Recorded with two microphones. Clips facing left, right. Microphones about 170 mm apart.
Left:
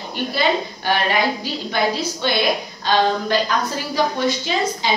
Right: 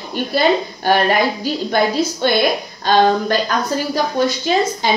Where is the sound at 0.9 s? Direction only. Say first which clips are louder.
Right 5 dB; 45° right (ahead or behind).